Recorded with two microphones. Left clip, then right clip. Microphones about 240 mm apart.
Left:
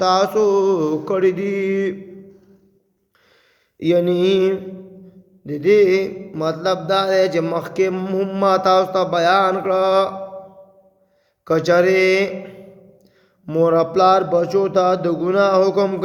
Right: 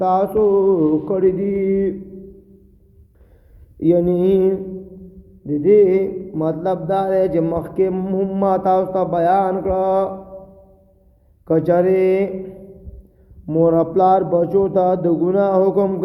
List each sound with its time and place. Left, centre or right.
0.0 s mantra: centre
3.8 s mantra: centre
11.4 s mantra: centre
13.4 s mantra: centre